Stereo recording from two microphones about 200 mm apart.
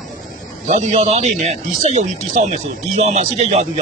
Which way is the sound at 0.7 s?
35° right (ahead or behind).